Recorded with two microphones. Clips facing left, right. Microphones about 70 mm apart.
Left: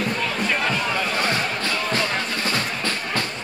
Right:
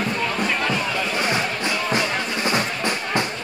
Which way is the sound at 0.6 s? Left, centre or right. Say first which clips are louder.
Even; centre.